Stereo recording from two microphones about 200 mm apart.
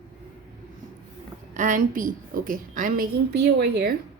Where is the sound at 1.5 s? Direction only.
40° right (ahead or behind).